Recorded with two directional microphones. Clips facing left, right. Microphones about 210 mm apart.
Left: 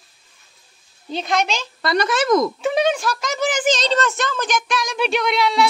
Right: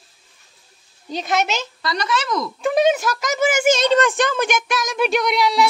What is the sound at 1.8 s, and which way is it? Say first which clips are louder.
Speech: left 7 dB; 55° left (ahead or behind).